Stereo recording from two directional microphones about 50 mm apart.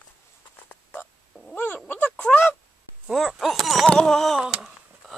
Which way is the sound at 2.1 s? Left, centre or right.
Left.